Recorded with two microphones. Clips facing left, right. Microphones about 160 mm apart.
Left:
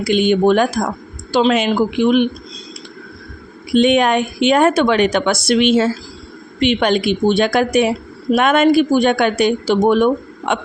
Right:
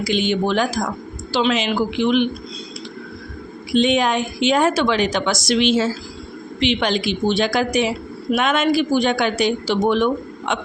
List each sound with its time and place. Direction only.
0.0 s speech: 55° left (ahead or behind)
1.3 s a woman's voice: 40° left (ahead or behind)
1.5 s speech: 55° left (ahead or behind)
3.7 s a woman's voice: 55° left (ahead or behind)